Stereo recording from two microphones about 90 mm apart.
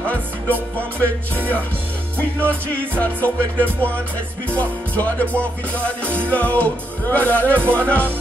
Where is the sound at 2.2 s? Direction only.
15° left (ahead or behind).